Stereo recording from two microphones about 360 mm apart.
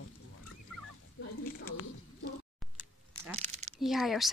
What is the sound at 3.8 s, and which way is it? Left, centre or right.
Speech, centre.